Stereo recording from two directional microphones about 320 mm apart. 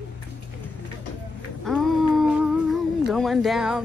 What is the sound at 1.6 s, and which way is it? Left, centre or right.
Humming, centre.